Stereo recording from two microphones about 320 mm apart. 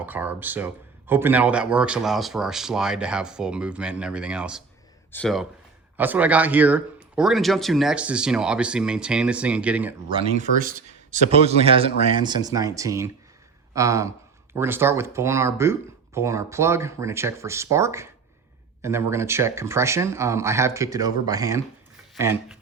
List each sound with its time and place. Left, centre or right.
0.0 s speech: centre
10.1 s speech: centre